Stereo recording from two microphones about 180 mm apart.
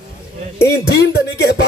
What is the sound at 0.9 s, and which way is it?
Speech, 65° left (ahead or behind).